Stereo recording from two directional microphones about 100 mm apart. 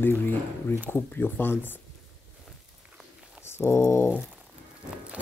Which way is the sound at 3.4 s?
25° left (ahead or behind).